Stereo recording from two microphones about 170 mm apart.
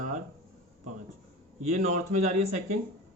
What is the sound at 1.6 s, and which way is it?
Speech, 45° right (ahead or behind).